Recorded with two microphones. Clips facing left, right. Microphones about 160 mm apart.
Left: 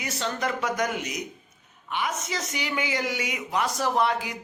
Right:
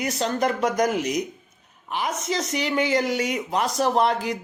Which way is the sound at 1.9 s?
35° right (ahead or behind).